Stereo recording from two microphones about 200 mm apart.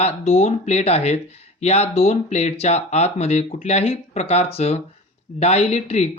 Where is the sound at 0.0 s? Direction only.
30° left (ahead or behind).